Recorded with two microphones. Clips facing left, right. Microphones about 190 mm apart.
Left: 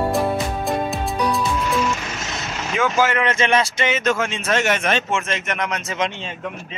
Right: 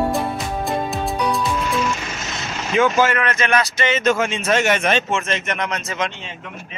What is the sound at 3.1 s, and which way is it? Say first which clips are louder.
Speech: left 1 dB; 25° left (ahead or behind).